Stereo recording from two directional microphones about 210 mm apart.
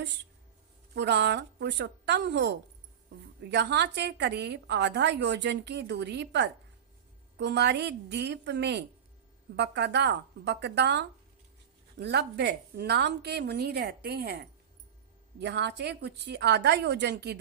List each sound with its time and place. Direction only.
0.9 s a woman's voice: 55° right (ahead or behind)